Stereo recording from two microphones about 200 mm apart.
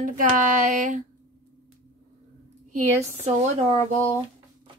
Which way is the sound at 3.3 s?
35° right (ahead or behind).